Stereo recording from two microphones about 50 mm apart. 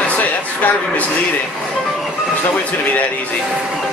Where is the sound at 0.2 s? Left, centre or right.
Left.